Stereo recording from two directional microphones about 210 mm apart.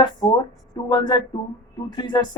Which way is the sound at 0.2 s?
25° left (ahead or behind).